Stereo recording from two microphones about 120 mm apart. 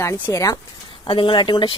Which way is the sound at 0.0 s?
25° left (ahead or behind).